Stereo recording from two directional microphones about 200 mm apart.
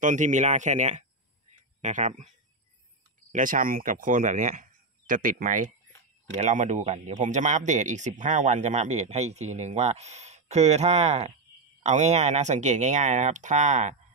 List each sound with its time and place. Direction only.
0.0 s speech: 40° right (ahead or behind)